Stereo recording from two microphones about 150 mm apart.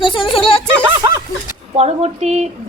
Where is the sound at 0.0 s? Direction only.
35° left (ahead or behind).